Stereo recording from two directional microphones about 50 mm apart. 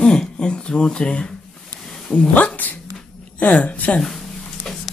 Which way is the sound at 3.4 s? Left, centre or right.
Left.